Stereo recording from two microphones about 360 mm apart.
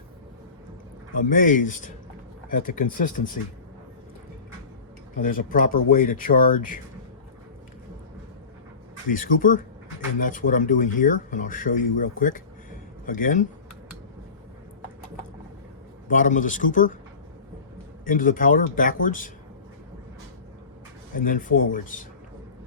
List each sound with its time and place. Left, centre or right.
1.1 s speech: left
5.2 s speech: left
9.0 s speech: left
16.0 s speech: left
18.0 s speech: left
21.2 s speech: left